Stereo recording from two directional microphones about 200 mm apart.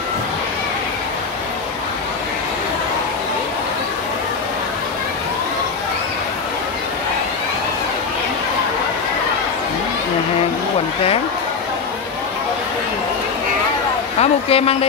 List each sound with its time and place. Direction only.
14.2 s speech: 30° left (ahead or behind)